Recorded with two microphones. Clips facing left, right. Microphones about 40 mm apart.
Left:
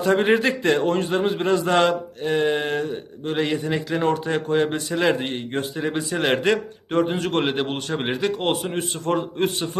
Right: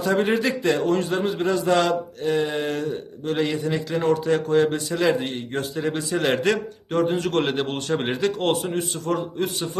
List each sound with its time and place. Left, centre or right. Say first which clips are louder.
0.0 s a man's voice: left 3 dB; left; by 8.7 s centre
8.7 s a man's voice: left 1 dB; left